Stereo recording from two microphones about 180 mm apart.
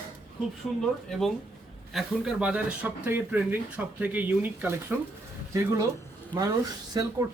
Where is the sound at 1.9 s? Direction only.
5° right (ahead or behind).